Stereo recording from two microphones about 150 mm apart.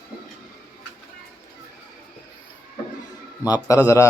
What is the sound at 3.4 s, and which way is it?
Speech, 25° left (ahead or behind).